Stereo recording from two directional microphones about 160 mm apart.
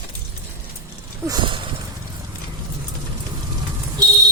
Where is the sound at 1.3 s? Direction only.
30° right (ahead or behind).